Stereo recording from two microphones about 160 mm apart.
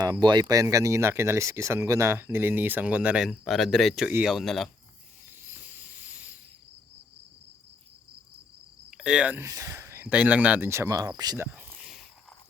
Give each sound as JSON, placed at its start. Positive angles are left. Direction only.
{"t": 0.0, "sound": "speech", "side_deg": -25}
{"t": 5.4, "sound": "cricket", "side_deg": -10}
{"t": 8.9, "sound": "speech", "side_deg": -5}
{"t": 11.5, "sound": "a sound", "side_deg": -10}